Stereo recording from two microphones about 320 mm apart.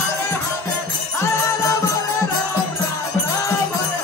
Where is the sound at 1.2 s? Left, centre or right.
Centre.